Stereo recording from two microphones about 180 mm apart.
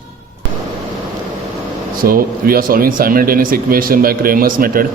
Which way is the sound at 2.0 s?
55° right (ahead or behind).